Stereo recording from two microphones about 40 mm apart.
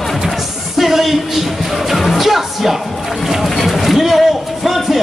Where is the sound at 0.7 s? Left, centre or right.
Centre.